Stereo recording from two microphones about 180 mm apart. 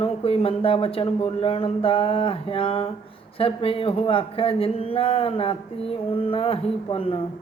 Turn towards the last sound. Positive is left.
turn(degrees=30)  # may be behind; listen again after turning